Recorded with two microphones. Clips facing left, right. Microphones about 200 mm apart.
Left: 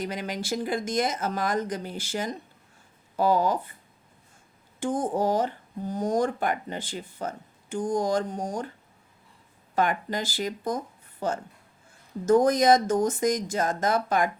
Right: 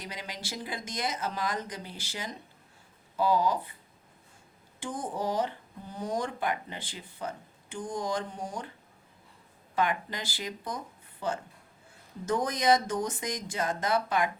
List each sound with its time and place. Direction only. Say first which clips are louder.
0.0 s speech: left 9 dB; 50° left (ahead or behind)
4.8 s speech: left 8 dB; 45° left (ahead or behind)
9.7 s speech: left 4 dB; 45° left (ahead or behind)